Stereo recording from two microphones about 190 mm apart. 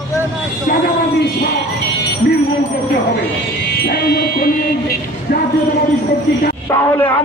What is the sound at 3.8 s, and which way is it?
Speech, 55° left (ahead or behind).